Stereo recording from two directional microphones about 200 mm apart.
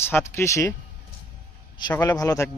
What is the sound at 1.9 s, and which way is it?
Speech, 15° left (ahead or behind).